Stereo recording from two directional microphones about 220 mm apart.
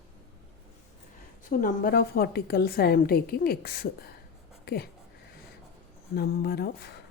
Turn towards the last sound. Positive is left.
turn(degrees=45)  # may be behind; listen again after turning